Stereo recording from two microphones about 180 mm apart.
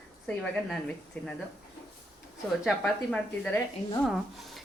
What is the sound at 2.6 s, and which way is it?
A woman's voice, 5° left (ahead or behind).